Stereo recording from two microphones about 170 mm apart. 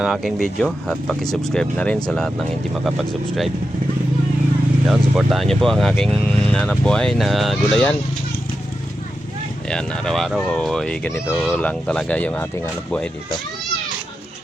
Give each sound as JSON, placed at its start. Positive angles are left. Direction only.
{"t": 0.0, "sound": "speech", "side_deg": 0}
{"t": 4.9, "sound": "speech", "side_deg": 0}
{"t": 9.6, "sound": "speech", "side_deg": 5}